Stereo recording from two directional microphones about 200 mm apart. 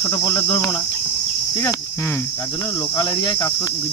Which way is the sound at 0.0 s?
20° left (ahead or behind).